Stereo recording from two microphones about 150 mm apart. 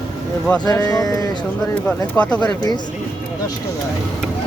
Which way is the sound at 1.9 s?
10° left (ahead or behind).